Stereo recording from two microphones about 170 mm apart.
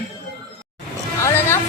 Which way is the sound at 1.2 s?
15° left (ahead or behind).